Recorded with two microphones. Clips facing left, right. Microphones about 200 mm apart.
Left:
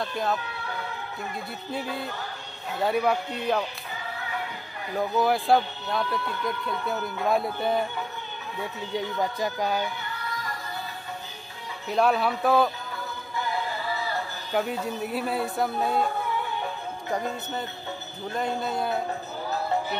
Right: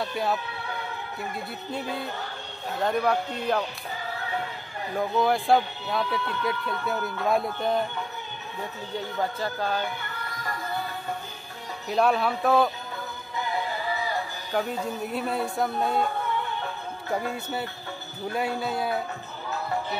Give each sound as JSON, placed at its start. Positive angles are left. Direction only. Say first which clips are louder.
{"t": 0.0, "sound": "speech", "louder": "even", "side_deg": -5}
{"t": 2.8, "sound": "speech", "louder": "even", "side_deg": 5}
{"t": 4.9, "sound": "speech", "louder": "even", "side_deg": 0}
{"t": 8.9, "sound": "speech", "louder": "left 1 dB", "side_deg": 15}
{"t": 11.9, "sound": "speech", "louder": "even", "side_deg": 0}
{"t": 14.5, "sound": "speech", "louder": "left 1 dB", "side_deg": 5}
{"t": 17.1, "sound": "speech", "louder": "right 1 dB", "side_deg": -10}